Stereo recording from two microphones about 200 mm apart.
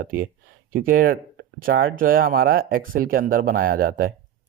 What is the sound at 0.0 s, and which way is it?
Speech, 45° right (ahead or behind).